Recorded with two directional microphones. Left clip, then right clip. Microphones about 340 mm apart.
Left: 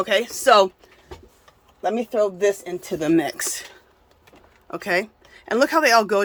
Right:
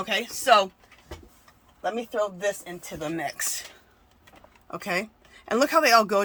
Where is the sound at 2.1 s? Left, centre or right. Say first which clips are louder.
Left 8 dB; left.